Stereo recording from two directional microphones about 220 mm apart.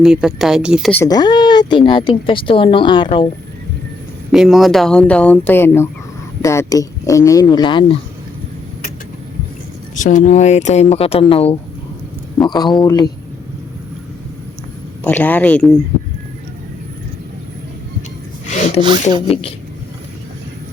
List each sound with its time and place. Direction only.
0.0 s speech: centre (ahead or behind)
0.9 s a woman's voice: 15° left (ahead or behind)
4.3 s speech: centre (ahead or behind); by 7.9 s 20° left (ahead or behind)
9.9 s a woman's voice: 35° left (ahead or behind); by 13.1 s 15° left (ahead or behind)
15.0 s speech: 10° left (ahead or behind)
18.4 s a sound: 30° left (ahead or behind)
19.3 s a woman's voice: 25° left (ahead or behind)